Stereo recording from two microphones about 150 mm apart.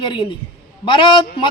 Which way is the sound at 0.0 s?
35° left (ahead or behind).